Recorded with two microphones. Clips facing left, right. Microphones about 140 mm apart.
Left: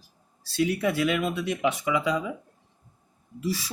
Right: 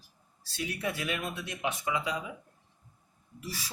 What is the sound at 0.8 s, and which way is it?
Speech, 90° left.